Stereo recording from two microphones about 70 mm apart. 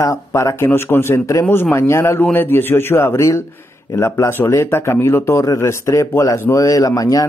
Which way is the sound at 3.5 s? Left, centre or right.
Left.